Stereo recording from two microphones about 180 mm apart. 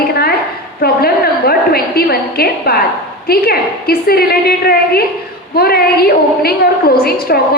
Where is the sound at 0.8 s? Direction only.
60° left (ahead or behind).